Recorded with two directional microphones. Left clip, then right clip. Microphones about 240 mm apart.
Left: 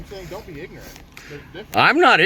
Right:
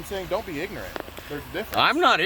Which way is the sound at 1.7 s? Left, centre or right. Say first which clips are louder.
Left 6 dB; centre.